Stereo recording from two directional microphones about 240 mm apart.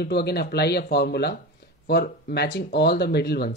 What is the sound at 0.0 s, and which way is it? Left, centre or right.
Speech, left.